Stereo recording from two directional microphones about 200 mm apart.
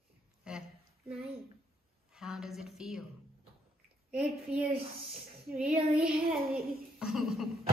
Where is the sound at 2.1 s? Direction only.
Centre (ahead or behind).